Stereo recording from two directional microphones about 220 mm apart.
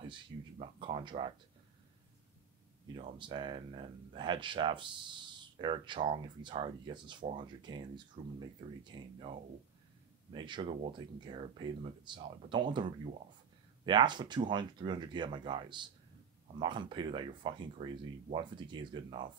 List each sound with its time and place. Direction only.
0.0 s a sound: 20° right (ahead or behind)
3.0 s speech: 25° right (ahead or behind)
10.3 s speech: 20° right (ahead or behind)